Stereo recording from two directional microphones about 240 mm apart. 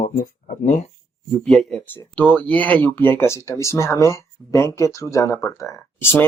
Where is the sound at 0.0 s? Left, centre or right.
Left.